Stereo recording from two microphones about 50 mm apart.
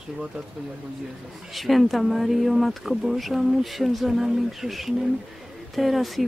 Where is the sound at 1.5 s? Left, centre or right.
Centre.